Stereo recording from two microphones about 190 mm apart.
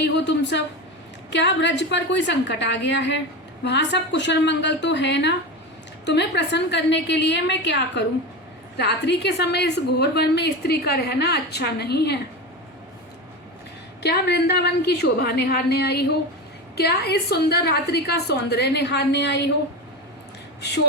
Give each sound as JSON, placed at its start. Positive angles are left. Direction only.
{"t": 0.0, "sound": "a woman's voice", "side_deg": 65}
{"t": 14.0, "sound": "a woman's voice", "side_deg": 60}
{"t": 20.6, "sound": "speech", "side_deg": 65}